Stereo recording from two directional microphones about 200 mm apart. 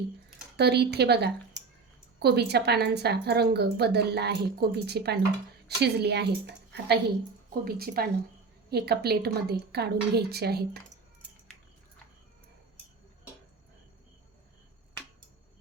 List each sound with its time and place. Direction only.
0.5 s a woman's voice: 55° right (ahead or behind)